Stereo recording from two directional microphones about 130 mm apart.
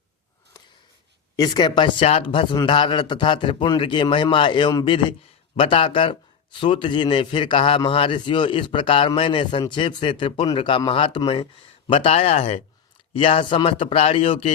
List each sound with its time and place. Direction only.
1.4 s a man's voice: 35° left (ahead or behind)
5.5 s a man's voice: 45° left (ahead or behind)